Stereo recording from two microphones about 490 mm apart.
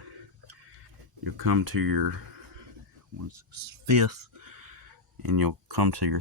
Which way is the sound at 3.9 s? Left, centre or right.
Right.